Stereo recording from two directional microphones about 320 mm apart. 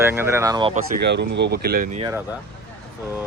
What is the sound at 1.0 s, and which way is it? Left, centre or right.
Speech, right.